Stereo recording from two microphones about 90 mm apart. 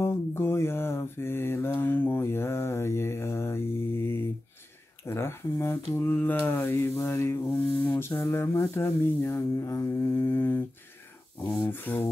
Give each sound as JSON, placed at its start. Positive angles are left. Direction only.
{"t": 0.0, "sound": "mantra", "side_deg": 25}
{"t": 5.0, "sound": "speech", "side_deg": 30}
{"t": 7.8, "sound": "a sound", "side_deg": 20}
{"t": 11.6, "sound": "speech", "side_deg": 20}